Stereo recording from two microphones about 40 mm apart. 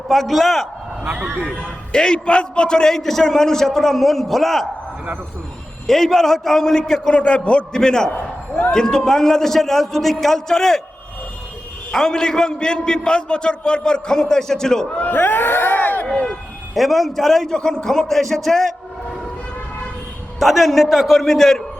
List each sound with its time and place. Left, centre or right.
0.1 s a man's voice: centre
1.0 s a man's voice: right
1.6 s a man's voice: left
2.9 s a man's voice: centre
5.9 s a man's voice: centre
7.1 s a man's voice: left
7.8 s a man's voice: centre
11.9 s a man's voice: centre
15.0 s speech: left
16.0 s a sound: centre
16.7 s a man's voice: centre
17.5 s a man's voice: centre
20.4 s a man's voice: centre
21.2 s a man's voice: centre